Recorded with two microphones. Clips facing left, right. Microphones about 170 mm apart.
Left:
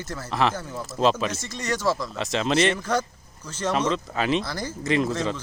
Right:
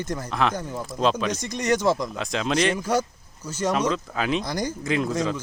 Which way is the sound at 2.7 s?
10° right (ahead or behind).